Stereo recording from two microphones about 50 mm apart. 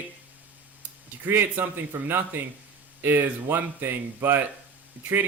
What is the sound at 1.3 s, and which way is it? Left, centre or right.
Speech, right.